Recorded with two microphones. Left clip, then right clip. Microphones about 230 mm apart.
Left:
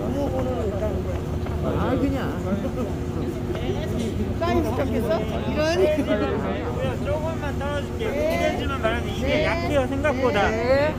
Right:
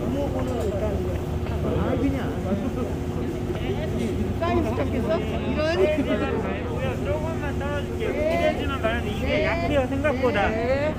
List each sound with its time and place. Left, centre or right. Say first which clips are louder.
4.4 s vehicle: left 1 dB; left
8.0 s vehicle: even; left